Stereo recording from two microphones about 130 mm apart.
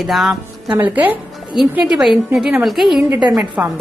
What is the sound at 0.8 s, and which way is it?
A woman's voice, 15° right (ahead or behind).